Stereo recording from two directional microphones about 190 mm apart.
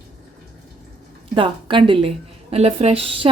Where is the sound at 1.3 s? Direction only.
25° right (ahead or behind).